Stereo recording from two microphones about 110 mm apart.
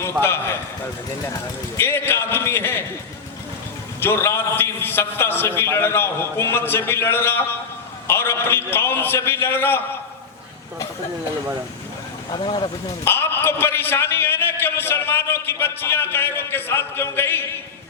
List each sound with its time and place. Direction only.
0.0 s a man's voice: 20° left (ahead or behind)
1.8 s a man's voice: 20° left (ahead or behind)
4.0 s a man's voice: 20° left (ahead or behind)
12.3 s speech: 45° left (ahead or behind)
13.1 s a man's voice: 20° left (ahead or behind)